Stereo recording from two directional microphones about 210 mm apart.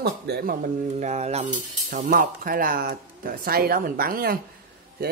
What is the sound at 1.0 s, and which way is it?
Speech, 30° right (ahead or behind).